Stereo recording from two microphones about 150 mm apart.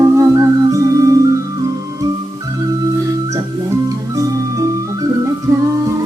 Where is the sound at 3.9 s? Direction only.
20° right (ahead or behind).